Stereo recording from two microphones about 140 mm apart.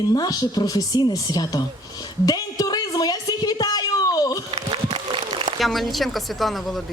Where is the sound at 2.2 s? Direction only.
25° left (ahead or behind).